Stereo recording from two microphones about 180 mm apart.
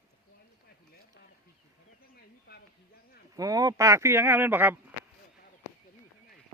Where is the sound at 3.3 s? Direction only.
20° right (ahead or behind).